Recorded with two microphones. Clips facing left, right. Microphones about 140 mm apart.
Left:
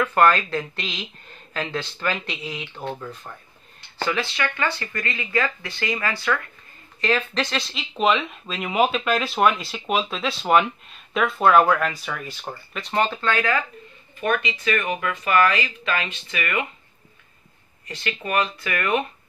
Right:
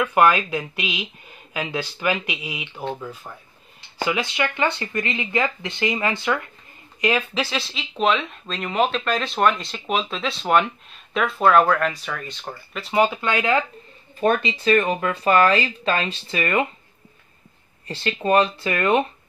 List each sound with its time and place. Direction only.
0.0 s speech: 10° right (ahead or behind)
14.2 s speech: 30° right (ahead or behind)
17.8 s speech: 30° right (ahead or behind)